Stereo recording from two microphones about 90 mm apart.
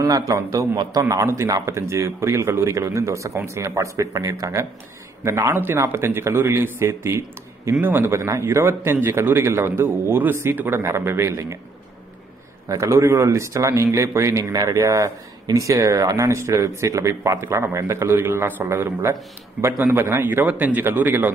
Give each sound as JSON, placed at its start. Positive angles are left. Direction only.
{"t": 0.0, "sound": "a man's voice", "side_deg": -40}
{"t": 12.6, "sound": "a man's voice", "side_deg": -35}